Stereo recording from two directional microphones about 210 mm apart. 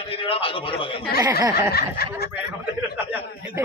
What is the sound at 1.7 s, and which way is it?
Snicker, 50° left (ahead or behind).